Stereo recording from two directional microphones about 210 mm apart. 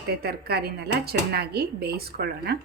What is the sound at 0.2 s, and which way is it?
A woman's voice, 50° right (ahead or behind).